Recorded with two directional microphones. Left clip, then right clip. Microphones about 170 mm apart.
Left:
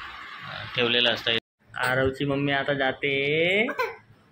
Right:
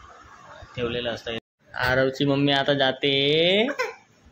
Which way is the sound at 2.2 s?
20° right (ahead or behind).